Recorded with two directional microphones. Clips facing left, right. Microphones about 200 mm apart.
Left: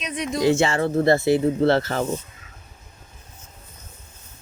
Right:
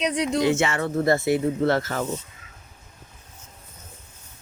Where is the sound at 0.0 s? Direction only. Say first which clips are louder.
Right 4 dB; 75° right (ahead or behind).